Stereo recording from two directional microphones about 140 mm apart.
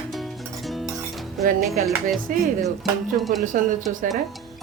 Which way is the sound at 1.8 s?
70° right (ahead or behind).